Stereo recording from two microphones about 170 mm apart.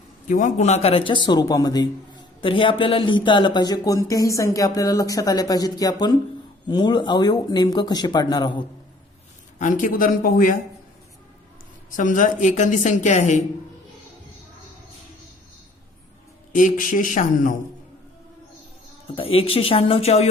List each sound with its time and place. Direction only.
0.3 s speech: 45° left (ahead or behind); by 8.6 s 25° left (ahead or behind)
9.6 s a woman's voice: 50° left (ahead or behind)
11.9 s a woman's voice: 50° left (ahead or behind)
16.5 s a woman's voice: 50° left (ahead or behind)
19.1 s speech: 35° left (ahead or behind)